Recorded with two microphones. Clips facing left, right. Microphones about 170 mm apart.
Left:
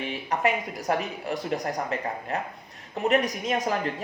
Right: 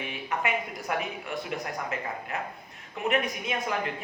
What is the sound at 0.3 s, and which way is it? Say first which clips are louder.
A woman's voice: left 4 dB; 35° left (ahead or behind).